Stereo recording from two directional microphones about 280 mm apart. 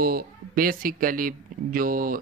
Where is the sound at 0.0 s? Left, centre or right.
Right.